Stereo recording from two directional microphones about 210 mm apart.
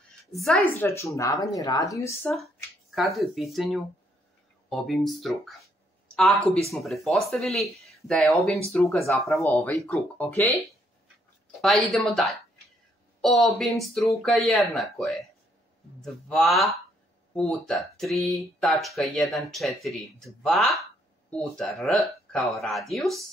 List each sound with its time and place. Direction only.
0.3 s speech: centre (ahead or behind)
0.7 s speech: 15° left (ahead or behind)
2.3 s speech: centre (ahead or behind)
11.6 s speech: centre (ahead or behind)